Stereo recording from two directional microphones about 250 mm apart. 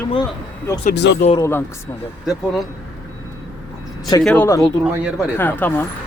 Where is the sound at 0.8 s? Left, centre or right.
Left.